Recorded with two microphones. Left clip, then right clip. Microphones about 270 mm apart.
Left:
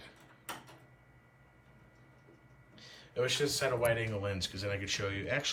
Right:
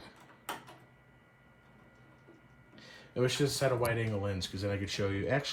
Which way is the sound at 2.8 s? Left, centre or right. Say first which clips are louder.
Right 1 dB; right.